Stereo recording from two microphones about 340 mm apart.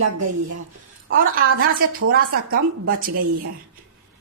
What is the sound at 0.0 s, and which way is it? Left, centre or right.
Speech, right.